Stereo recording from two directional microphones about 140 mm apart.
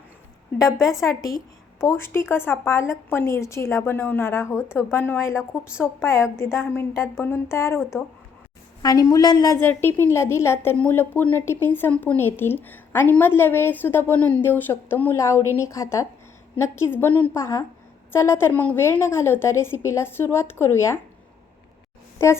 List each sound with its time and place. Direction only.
0.9 s a woman's voice: 25° left (ahead or behind)
8.8 s a woman's voice: 25° left (ahead or behind)
9.6 s a woman's voice: 15° left (ahead or behind)